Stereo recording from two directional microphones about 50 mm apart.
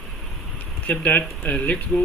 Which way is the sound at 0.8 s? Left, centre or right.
Left.